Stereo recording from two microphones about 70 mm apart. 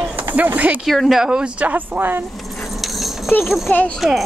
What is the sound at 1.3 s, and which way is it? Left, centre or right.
Speech, centre.